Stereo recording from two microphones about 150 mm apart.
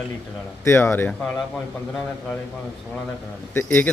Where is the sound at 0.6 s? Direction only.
15° left (ahead or behind).